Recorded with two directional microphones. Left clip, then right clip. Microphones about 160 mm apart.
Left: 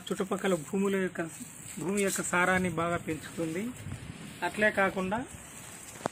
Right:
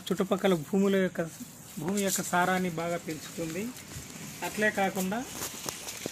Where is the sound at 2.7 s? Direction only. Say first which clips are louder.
Left 2 dB; 20° left (ahead or behind).